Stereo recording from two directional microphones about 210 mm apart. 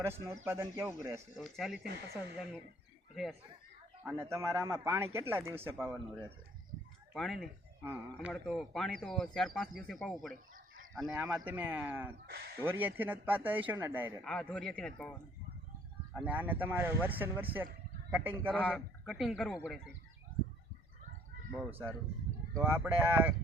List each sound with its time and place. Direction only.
0.4 s speech: 10° right (ahead or behind)
1.4 s speech: centre (ahead or behind)
1.8 s speech: 50° right (ahead or behind)
4.0 s speech: 10° right (ahead or behind)
10.3 s chicken: 40° right (ahead or behind)
11.1 s speech: 10° right (ahead or behind)
12.2 s speech: 50° right (ahead or behind)
12.5 s speech: 10° right (ahead or behind)
14.3 s speech: 5° left (ahead or behind)
16.2 s speech: 10° right (ahead or behind)
18.5 s speech: 5° left (ahead or behind)
21.7 s speech: 10° right (ahead or behind)